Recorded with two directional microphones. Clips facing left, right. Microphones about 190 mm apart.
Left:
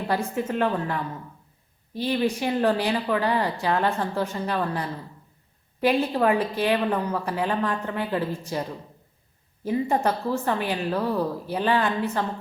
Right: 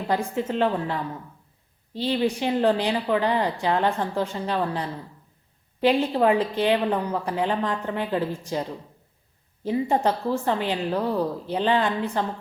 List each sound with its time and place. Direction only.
0.1 s a woman's voice: 15° right (ahead or behind)
1.9 s a woman's voice: 10° left (ahead or behind)
2.1 s a woman's voice: 20° right (ahead or behind)
9.6 s a woman's voice: 20° right (ahead or behind)